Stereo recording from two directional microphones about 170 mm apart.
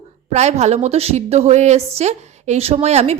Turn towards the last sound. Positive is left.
turn(degrees=-40)  # may be behind; listen again after turning